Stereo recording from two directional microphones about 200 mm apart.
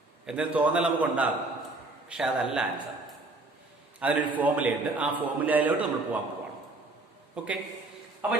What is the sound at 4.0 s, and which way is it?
A man's voice, 5° right (ahead or behind).